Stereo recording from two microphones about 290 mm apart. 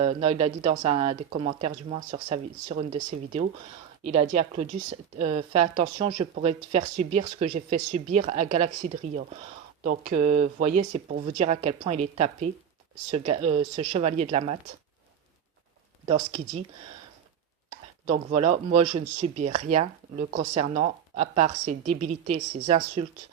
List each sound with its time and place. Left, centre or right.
0.0 s speech: right
16.0 s speech: right
18.1 s speech: right